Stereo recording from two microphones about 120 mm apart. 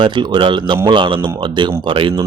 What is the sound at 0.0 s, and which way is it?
Speech, 40° right (ahead or behind).